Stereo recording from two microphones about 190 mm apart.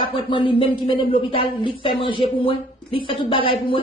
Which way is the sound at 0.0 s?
25° left (ahead or behind).